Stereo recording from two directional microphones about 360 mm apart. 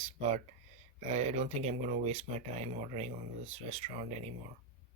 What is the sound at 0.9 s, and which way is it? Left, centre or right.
Speech, centre.